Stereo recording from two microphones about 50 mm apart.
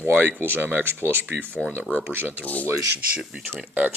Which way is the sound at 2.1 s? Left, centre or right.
Right.